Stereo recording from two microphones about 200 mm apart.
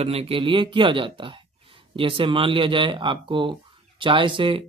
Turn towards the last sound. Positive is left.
turn(degrees=-25)  # may be behind; listen again after turning